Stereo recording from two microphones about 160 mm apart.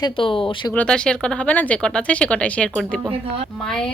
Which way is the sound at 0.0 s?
30° left (ahead or behind).